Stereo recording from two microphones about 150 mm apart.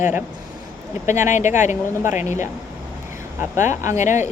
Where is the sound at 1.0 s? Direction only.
55° left (ahead or behind).